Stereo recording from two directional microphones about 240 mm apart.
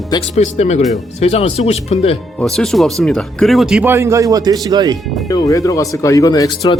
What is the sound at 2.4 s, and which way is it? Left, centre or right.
Speech, centre.